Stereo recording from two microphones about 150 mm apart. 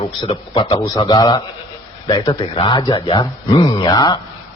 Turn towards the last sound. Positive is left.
turn(degrees=25)  # may be behind; listen again after turning